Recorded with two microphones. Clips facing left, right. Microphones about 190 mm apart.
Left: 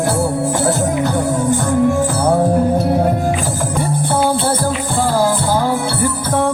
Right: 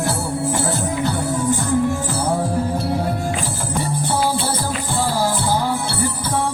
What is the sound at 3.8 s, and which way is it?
Music, 55° left (ahead or behind).